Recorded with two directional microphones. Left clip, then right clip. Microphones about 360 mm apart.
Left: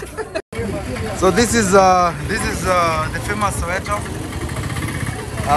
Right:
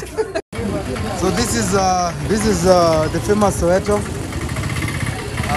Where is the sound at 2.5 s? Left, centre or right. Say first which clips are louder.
Right 4 dB; centre.